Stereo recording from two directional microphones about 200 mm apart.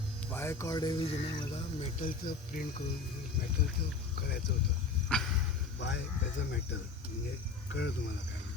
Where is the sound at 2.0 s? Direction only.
45° left (ahead or behind).